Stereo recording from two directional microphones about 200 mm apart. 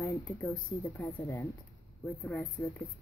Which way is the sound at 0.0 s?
15° left (ahead or behind).